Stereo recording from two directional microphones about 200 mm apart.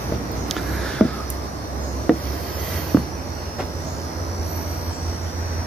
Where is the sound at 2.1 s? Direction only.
Centre (ahead or behind).